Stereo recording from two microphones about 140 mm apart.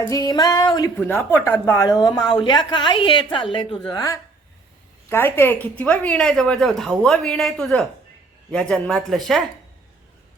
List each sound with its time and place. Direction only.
0.1 s a sound: 25° left (ahead or behind)
0.9 s a woman's voice: 15° left (ahead or behind)
5.0 s a woman's voice: 15° left (ahead or behind)